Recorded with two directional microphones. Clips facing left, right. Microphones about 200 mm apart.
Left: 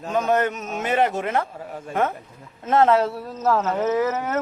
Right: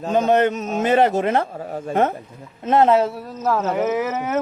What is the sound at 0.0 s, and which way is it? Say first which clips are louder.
Speech: right 4 dB; 25° right (ahead or behind).